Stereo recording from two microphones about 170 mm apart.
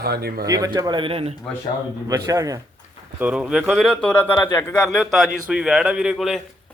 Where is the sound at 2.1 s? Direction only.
20° right (ahead or behind).